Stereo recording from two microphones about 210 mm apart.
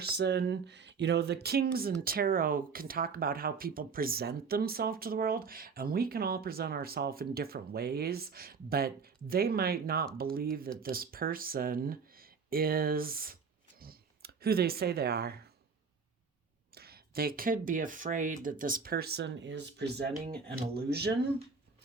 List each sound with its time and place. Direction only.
0.0 s speech: 50° right (ahead or behind)
16.7 s speech: 45° right (ahead or behind)